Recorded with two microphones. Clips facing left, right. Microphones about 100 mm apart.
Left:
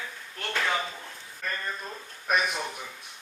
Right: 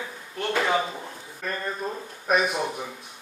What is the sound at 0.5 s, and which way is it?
Speech, 25° right (ahead or behind).